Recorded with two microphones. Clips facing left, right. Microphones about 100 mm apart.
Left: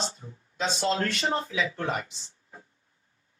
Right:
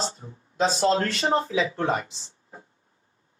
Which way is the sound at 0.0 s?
30° right (ahead or behind).